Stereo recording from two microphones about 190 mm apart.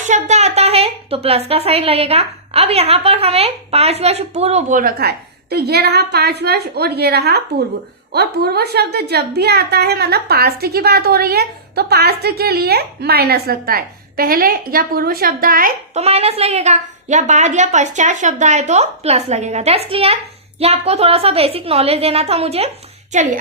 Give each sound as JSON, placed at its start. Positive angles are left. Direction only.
{"t": 0.0, "sound": "a woman's voice", "side_deg": -40}
{"t": 16.0, "sound": "speech", "side_deg": -30}